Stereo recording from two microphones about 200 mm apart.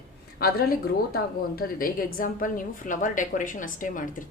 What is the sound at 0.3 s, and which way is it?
A woman's voice, 50° left (ahead or behind).